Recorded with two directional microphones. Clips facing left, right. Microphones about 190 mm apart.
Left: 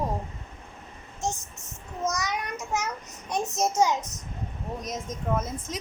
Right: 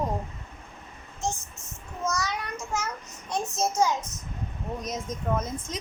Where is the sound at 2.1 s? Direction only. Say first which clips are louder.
Even; 20° left (ahead or behind).